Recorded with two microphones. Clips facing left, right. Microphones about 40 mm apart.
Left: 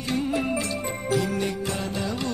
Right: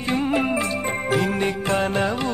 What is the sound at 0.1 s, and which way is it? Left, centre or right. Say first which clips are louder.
Music: right 4 dB; right.